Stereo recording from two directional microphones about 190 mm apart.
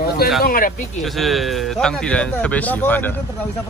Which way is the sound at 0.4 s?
50° left (ahead or behind).